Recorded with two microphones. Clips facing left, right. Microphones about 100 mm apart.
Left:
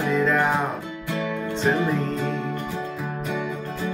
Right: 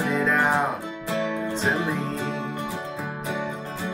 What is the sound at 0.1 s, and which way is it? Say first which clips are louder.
Music: left 2 dB; centre (ahead or behind).